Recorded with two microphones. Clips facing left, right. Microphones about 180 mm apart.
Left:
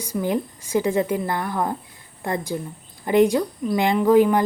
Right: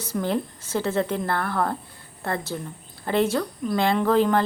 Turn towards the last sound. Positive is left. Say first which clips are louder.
# left 4 dB
turn(degrees=15)  # may be behind; listen again after turning